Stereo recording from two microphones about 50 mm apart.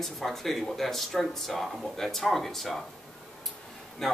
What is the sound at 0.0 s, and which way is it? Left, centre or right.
Speech, centre.